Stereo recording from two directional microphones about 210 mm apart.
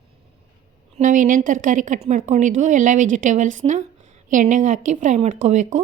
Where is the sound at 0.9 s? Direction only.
40° right (ahead or behind).